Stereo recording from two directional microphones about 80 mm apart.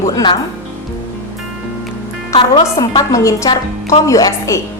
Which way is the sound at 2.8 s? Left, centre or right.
Left.